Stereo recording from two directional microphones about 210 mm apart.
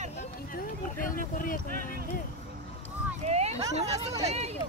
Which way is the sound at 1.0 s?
40° left (ahead or behind).